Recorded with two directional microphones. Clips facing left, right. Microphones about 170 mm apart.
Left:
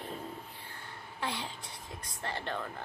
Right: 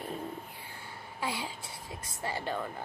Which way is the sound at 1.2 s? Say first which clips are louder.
Right 2 dB; 10° right (ahead or behind).